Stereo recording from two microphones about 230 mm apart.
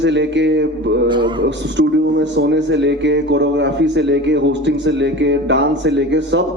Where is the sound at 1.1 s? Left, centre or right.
Centre.